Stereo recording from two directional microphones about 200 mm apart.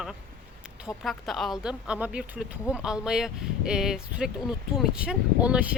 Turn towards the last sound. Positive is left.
turn(degrees=-5)  # may be behind; listen again after turning